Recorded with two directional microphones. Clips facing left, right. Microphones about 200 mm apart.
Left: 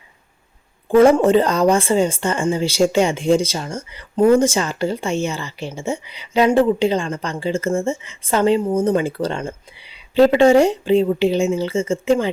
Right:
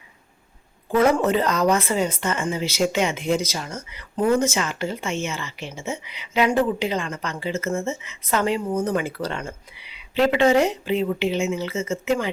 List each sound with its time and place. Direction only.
0.9 s speech: 30° left (ahead or behind)